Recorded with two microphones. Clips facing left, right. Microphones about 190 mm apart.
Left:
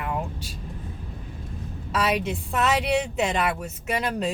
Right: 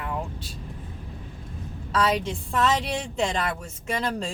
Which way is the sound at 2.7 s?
70° left (ahead or behind).